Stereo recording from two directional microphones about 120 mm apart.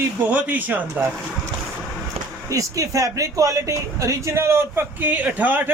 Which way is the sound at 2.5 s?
30° right (ahead or behind).